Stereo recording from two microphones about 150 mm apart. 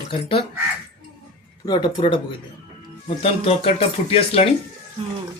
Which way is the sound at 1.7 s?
30° left (ahead or behind).